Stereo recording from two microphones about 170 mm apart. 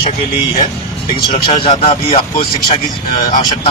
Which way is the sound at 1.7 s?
35° left (ahead or behind).